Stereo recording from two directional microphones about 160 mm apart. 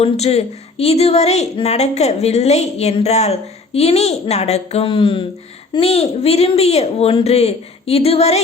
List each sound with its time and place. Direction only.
0.0 s speech: 40° left (ahead or behind)